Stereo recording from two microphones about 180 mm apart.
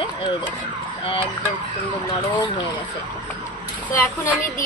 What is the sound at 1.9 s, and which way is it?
Speech, 25° left (ahead or behind).